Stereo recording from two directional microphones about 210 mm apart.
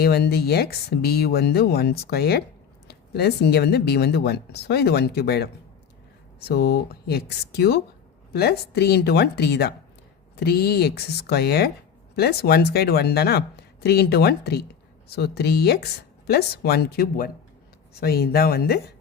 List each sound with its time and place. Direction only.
0.0 s speech: 50° left (ahead or behind)
6.5 s speech: 50° left (ahead or behind)